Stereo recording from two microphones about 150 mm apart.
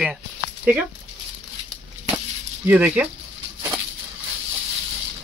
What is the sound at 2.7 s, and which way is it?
Speech, 10° right (ahead or behind).